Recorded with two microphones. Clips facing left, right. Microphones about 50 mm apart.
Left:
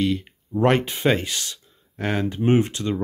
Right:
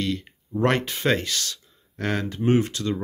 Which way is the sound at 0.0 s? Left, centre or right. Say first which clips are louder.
Left 4 dB; centre.